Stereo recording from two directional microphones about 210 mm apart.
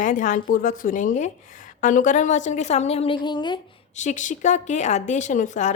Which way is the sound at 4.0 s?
35° left (ahead or behind).